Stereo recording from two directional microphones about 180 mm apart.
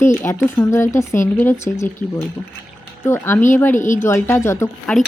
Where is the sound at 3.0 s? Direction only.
15° left (ahead or behind).